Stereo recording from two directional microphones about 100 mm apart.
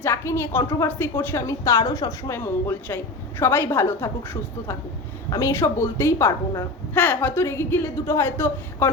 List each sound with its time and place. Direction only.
0.0 s a woman's voice: 25° left (ahead or behind)
5.3 s a woman's voice: 30° left (ahead or behind)
6.9 s a woman's voice: 15° left (ahead or behind)